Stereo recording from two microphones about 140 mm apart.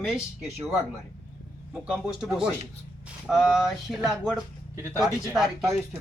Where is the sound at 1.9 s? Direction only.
5° right (ahead or behind).